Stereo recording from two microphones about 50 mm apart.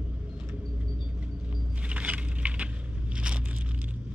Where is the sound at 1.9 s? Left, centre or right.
Right.